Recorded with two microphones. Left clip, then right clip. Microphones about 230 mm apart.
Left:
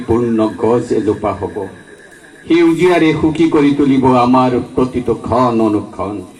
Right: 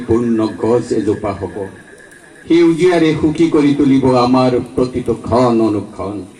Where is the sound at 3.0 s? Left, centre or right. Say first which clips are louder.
Left 1 dB; left.